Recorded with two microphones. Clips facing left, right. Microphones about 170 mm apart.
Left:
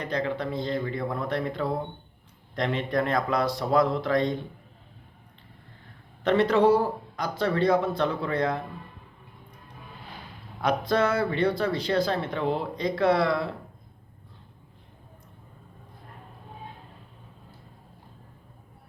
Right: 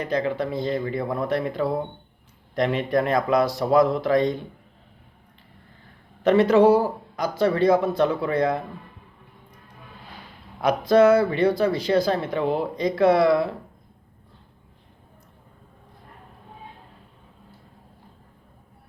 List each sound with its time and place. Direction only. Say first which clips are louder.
0.1 s speech: right 4 dB; 5° right (ahead or behind)
6.2 s speech: right 5 dB; 5° right (ahead or behind)
10.6 s speech: right 7 dB; 10° right (ahead or behind)